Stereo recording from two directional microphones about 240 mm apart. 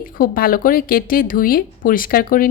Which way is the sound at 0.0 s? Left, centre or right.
Left.